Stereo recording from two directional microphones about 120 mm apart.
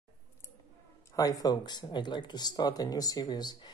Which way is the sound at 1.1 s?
30° left (ahead or behind).